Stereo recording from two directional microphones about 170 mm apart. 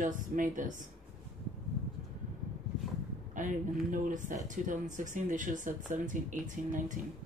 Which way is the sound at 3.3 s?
50° right (ahead or behind).